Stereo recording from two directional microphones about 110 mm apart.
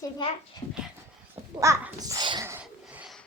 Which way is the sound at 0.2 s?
45° left (ahead or behind).